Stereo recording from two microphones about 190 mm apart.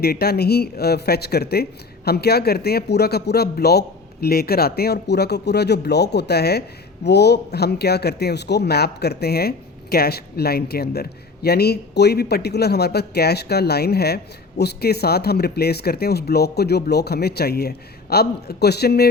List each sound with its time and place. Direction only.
0.0 s a man's voice: 55° left (ahead or behind)